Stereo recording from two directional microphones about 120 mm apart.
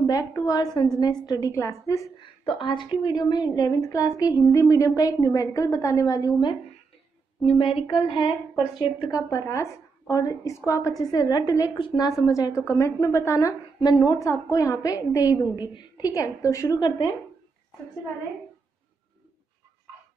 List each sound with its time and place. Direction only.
0.0 s a woman's voice: 30° left (ahead or behind)
2.1 s a woman's voice: 45° left (ahead or behind); by 6.5 s 30° left (ahead or behind)
7.4 s a woman's voice: 50° left (ahead or behind)
9.3 s a woman's voice: 25° left (ahead or behind)
11.8 s speech: 40° left (ahead or behind)
12.2 s a woman's voice: 30° left (ahead or behind)
13.7 s a woman's voice: 40° left (ahead or behind)